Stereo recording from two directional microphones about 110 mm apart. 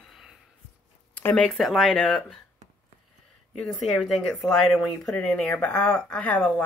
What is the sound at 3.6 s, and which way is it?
Speech, centre (ahead or behind).